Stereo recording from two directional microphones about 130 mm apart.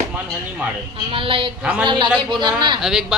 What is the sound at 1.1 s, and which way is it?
Speech, 45° right (ahead or behind).